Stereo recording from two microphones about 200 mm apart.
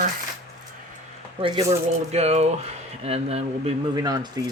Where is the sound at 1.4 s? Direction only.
30° right (ahead or behind).